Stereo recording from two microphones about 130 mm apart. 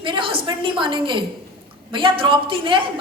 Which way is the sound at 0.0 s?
40° right (ahead or behind).